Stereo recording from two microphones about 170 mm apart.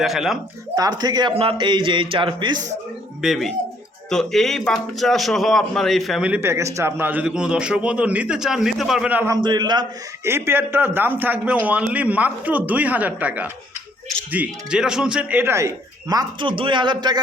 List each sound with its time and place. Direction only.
0.0 s a man's voice: centre (ahead or behind)
0.8 s speech: 25° right (ahead or behind)
3.2 s a man's voice: centre (ahead or behind)
9.3 s speech: 25° right (ahead or behind)
10.2 s a man's voice: 15° right (ahead or behind)